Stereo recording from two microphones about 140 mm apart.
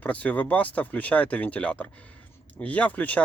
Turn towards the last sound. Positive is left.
turn(degrees=10)  # may be behind; listen again after turning